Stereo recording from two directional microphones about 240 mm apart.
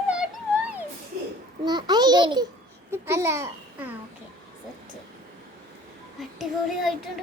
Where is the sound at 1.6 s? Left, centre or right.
Centre.